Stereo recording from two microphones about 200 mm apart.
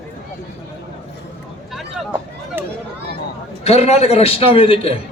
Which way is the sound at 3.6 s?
30° left (ahead or behind).